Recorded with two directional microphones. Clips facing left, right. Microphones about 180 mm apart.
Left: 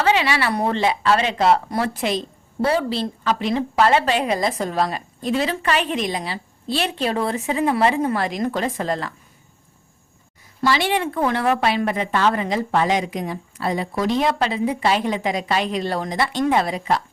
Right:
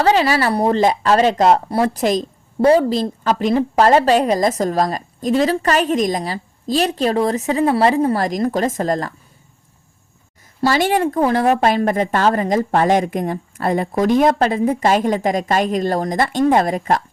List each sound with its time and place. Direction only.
0.0 s a woman's voice: 40° right (ahead or behind)
10.7 s a woman's voice: 45° right (ahead or behind)